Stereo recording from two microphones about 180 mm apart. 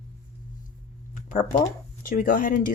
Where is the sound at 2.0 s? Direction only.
50° left (ahead or behind).